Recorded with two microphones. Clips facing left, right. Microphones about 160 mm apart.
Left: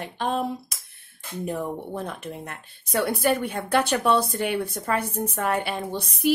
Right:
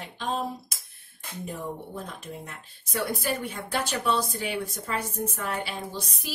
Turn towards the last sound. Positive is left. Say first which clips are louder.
# left 8 dB
turn(degrees=65)  # may be behind; listen again after turning